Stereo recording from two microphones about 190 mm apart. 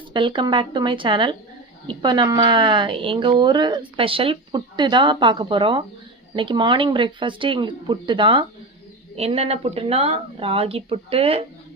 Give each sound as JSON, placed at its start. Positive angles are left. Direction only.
{"t": 0.1, "sound": "a woman's voice", "side_deg": -25}